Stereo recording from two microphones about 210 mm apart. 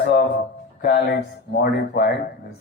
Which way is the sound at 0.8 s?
45° left (ahead or behind).